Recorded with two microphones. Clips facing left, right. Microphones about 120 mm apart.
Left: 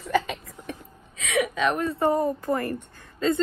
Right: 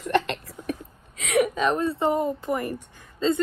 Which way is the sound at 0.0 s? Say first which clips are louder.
Right 1 dB; 75° right (ahead or behind).